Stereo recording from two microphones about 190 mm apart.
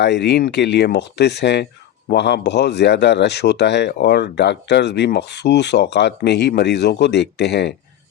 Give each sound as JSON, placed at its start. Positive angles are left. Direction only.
{"t": 0.0, "sound": "speech", "side_deg": 65}